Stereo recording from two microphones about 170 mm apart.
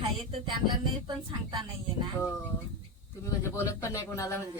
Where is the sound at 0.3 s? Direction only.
30° right (ahead or behind).